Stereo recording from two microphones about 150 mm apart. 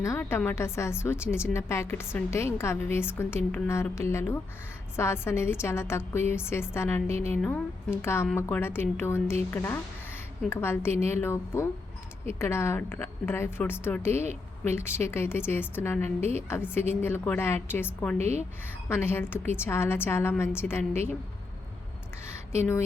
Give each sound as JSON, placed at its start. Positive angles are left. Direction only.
{"t": 0.0, "sound": "a woman's voice", "side_deg": 20}
{"t": 18.2, "sound": "a woman's voice", "side_deg": -45}
{"t": 18.9, "sound": "a woman's voice", "side_deg": 15}
{"t": 22.5, "sound": "a woman's voice", "side_deg": 15}